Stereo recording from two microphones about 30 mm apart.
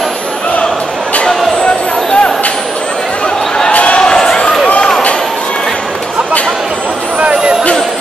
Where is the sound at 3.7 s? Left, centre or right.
Left.